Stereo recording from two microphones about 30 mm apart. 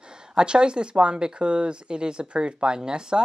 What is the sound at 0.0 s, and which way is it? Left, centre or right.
Speech, right.